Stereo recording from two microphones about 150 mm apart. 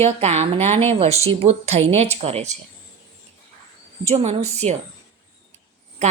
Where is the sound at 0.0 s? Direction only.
45° right (ahead or behind).